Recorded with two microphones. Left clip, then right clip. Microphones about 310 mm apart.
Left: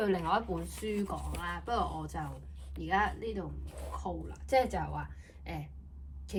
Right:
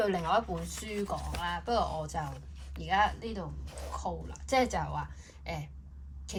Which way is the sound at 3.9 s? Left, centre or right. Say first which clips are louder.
Right 2 dB; centre.